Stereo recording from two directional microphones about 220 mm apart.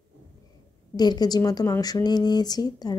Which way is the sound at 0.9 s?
20° left (ahead or behind).